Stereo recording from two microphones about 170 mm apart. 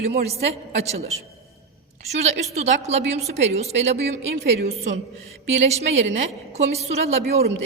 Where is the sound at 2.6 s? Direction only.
40° right (ahead or behind).